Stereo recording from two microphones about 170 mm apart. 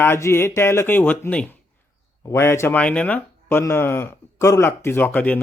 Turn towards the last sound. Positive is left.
turn(degrees=10)  # may be behind; listen again after turning